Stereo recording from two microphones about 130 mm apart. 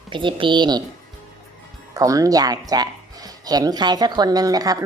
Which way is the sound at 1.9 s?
25° right (ahead or behind).